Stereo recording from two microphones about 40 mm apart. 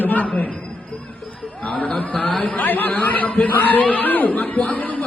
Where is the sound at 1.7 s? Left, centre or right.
Left.